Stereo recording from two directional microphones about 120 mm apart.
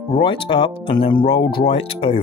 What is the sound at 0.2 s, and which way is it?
Speech, 40° left (ahead or behind).